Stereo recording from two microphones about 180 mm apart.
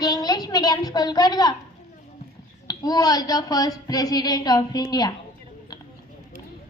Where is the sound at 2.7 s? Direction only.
20° left (ahead or behind).